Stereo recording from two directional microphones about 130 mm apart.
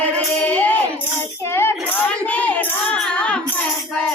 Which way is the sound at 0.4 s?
15° left (ahead or behind).